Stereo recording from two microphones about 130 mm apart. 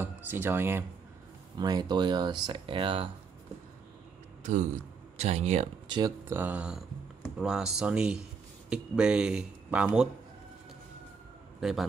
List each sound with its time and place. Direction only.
0.0 s speech: 15° right (ahead or behind)
1.6 s speech: 30° right (ahead or behind)
4.4 s a sound: 70° right (ahead or behind)
5.2 s speech: 55° right (ahead or behind)
5.9 s speech: 35° right (ahead or behind)
6.2 s speech: 15° right (ahead or behind)